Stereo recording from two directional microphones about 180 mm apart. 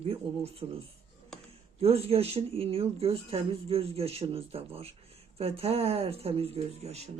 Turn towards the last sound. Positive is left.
turn(degrees=-35)  # may be behind; listen again after turning